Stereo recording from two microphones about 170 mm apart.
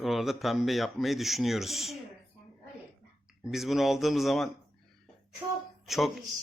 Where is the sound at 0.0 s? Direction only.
Centre (ahead or behind).